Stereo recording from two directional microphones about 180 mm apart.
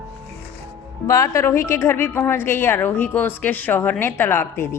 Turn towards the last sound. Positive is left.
turn(degrees=10)  # may be behind; listen again after turning